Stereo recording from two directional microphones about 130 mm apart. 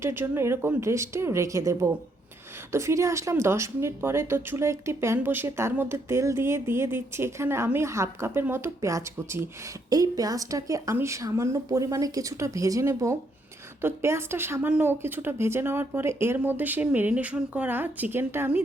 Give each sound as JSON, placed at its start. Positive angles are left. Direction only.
{"t": 0.0, "sound": "a woman's voice", "side_deg": -20}